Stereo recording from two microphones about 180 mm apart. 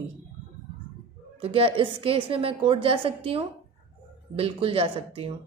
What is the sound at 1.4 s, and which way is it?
A woman's voice, 30° right (ahead or behind).